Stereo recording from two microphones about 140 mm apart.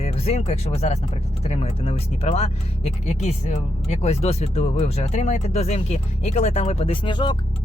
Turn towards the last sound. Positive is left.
turn(degrees=35)  # may be behind; listen again after turning